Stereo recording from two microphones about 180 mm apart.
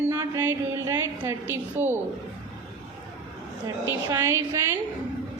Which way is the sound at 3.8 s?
15° right (ahead or behind).